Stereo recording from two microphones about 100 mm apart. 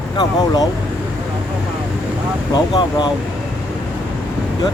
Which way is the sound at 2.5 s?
45° left (ahead or behind).